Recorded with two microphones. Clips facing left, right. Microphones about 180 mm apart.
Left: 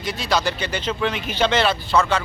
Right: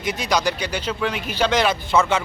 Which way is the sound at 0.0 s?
20° right (ahead or behind).